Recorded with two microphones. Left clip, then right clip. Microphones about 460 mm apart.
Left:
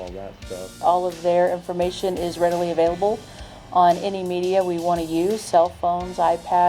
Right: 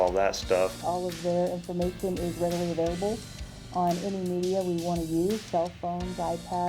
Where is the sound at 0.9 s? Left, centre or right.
Centre.